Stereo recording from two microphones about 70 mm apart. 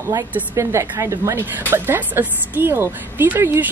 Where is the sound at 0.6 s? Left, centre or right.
Right.